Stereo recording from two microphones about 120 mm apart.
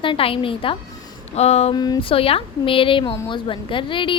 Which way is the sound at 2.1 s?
50° left (ahead or behind).